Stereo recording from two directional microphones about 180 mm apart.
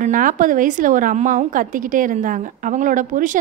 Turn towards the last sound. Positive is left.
turn(degrees=-45)  # may be behind; listen again after turning